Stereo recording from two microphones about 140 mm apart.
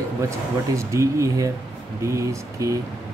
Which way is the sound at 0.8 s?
20° right (ahead or behind).